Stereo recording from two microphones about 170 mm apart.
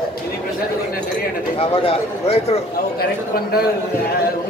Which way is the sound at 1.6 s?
35° left (ahead or behind).